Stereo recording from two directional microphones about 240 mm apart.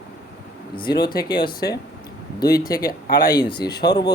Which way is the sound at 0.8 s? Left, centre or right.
Centre.